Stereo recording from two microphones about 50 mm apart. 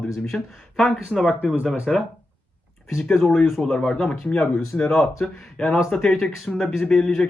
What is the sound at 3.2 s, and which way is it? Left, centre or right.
Speech, centre.